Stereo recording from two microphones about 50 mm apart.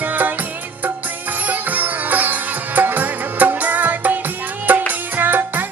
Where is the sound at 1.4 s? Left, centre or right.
Right.